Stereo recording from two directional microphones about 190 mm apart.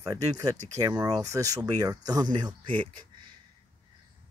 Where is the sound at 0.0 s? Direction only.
20° right (ahead or behind).